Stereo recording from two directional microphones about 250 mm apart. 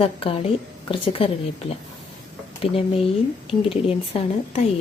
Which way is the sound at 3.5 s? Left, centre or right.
Left.